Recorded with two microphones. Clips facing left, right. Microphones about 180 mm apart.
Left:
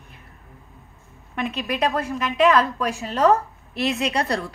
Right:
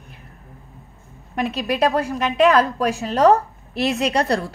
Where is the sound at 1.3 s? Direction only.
35° right (ahead or behind).